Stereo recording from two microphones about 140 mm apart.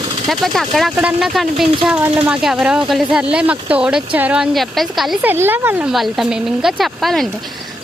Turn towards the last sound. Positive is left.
turn(degrees=0)  # may be behind; listen again after turning